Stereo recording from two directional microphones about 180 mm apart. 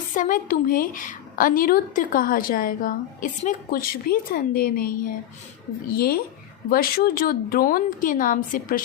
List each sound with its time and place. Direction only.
0.1 s a woman's voice: 45° left (ahead or behind)